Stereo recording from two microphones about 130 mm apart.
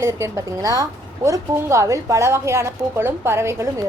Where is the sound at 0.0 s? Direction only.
20° right (ahead or behind).